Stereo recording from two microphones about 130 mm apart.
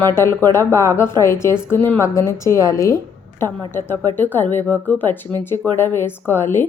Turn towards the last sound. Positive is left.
turn(degrees=15)  # may be behind; listen again after turning